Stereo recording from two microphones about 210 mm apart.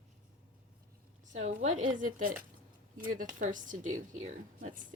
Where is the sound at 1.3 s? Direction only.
35° right (ahead or behind).